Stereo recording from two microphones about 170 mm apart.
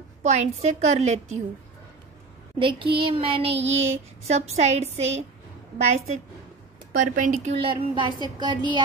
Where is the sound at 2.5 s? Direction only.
30° right (ahead or behind).